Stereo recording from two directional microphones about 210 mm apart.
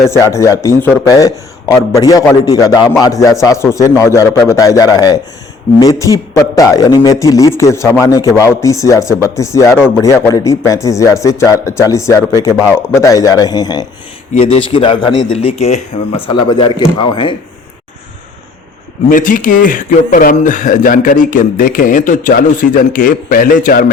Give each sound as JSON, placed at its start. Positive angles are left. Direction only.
{"t": 0.0, "sound": "a man's voice", "side_deg": 15}
{"t": 2.7, "sound": "a man's voice", "side_deg": -5}
{"t": 3.0, "sound": "a man's voice", "side_deg": 15}
{"t": 19.0, "sound": "speech", "side_deg": 40}